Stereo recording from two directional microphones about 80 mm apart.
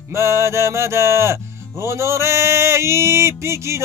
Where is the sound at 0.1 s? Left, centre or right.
Right.